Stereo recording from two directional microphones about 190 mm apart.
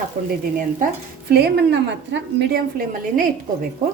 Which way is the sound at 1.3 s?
60° right (ahead or behind).